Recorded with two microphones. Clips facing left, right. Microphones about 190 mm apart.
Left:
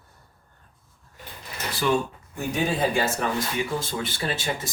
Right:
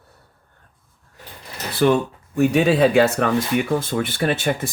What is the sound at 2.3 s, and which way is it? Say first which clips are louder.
Speech: right 10 dB; 70° right (ahead or behind).